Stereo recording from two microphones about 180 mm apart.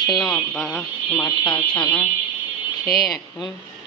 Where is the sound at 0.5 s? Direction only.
Centre (ahead or behind).